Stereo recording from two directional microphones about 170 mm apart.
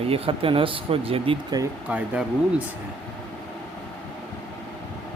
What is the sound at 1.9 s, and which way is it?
Speech, 10° right (ahead or behind).